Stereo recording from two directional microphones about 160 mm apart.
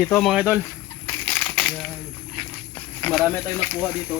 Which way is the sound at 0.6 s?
15° left (ahead or behind).